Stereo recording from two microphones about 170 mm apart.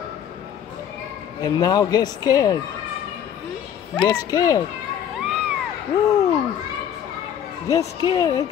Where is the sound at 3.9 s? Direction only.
25° left (ahead or behind).